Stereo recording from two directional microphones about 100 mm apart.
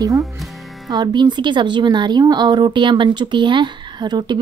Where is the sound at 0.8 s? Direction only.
45° right (ahead or behind).